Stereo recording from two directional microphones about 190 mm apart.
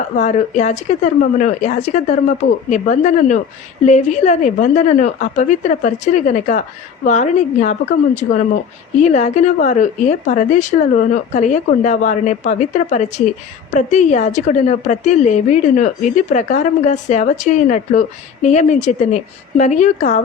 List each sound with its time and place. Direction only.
0.2 s a woman's voice: 40° left (ahead or behind)